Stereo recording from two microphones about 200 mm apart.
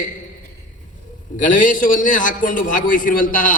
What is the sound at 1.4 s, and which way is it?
A man's voice, 40° left (ahead or behind).